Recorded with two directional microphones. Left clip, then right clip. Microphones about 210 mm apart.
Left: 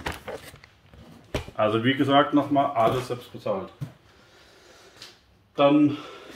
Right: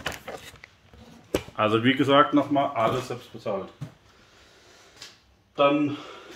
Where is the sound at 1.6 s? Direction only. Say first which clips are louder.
Even; 45° right (ahead or behind).